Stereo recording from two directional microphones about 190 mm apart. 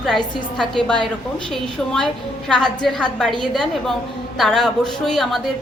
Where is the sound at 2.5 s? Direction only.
5° left (ahead or behind).